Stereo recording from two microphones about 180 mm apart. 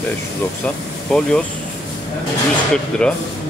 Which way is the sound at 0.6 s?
5° left (ahead or behind).